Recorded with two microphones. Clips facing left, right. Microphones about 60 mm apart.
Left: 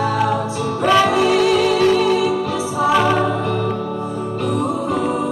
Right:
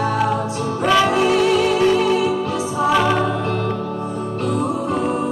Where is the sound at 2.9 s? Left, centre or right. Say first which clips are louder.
Left 1 dB; centre.